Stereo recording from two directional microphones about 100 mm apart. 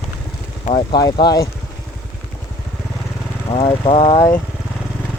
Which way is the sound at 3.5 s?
60° left (ahead or behind).